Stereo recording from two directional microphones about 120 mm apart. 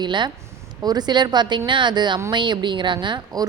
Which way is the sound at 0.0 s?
40° right (ahead or behind).